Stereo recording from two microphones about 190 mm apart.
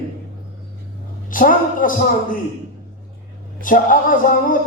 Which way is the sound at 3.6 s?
45° left (ahead or behind).